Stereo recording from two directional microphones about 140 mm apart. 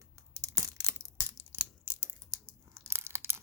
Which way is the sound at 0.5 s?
20° right (ahead or behind).